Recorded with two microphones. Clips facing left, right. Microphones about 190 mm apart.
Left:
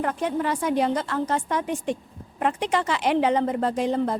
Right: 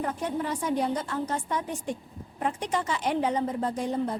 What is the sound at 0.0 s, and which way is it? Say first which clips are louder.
A woman's voice: left 4 dB; 85° left.